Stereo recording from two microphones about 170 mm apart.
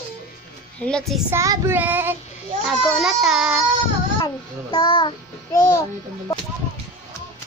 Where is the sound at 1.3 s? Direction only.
15° right (ahead or behind).